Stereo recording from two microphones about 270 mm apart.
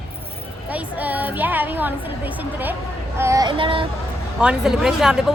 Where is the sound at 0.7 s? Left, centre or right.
Centre.